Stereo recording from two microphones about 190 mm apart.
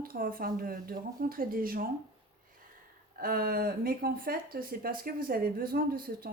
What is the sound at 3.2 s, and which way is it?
Speech, 50° right (ahead or behind).